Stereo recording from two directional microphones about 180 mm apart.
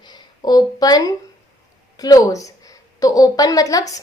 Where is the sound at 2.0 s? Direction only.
20° left (ahead or behind).